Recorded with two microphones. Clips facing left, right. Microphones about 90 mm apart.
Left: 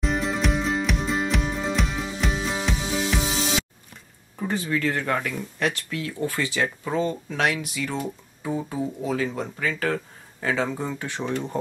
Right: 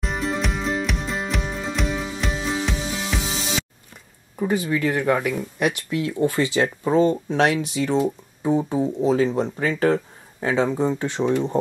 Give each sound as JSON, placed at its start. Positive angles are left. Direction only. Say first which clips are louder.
{"t": 0.0, "sound": "music", "louder": "left 1 dB", "side_deg": 0}
{"t": 4.4, "sound": "speech", "louder": "right 4 dB", "side_deg": -10}